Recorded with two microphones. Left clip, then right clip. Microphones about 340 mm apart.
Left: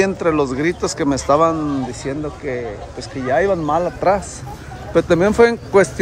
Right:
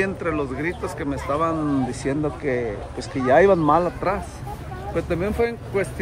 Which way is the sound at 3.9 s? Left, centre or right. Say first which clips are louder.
Left 8 dB; centre.